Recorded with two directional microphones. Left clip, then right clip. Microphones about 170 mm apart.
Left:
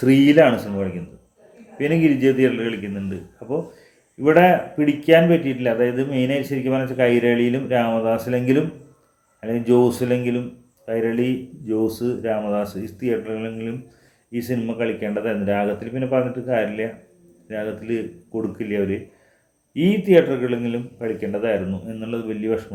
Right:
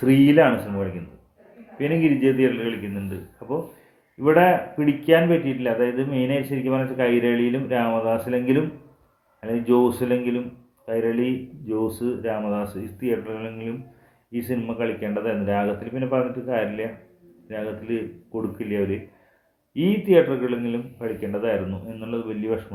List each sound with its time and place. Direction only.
0.0 s speech: 15° left (ahead or behind)
1.8 s speech: 15° left (ahead or behind)
4.2 s speech: 15° left (ahead or behind)